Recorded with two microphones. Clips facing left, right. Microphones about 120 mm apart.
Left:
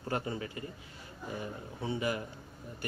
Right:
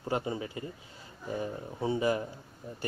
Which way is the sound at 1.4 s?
30° right (ahead or behind).